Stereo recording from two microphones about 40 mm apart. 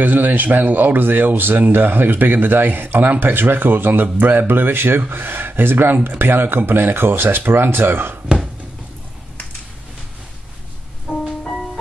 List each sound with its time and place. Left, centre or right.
0.0 s speech: right
11.1 s music: centre
11.4 s music: centre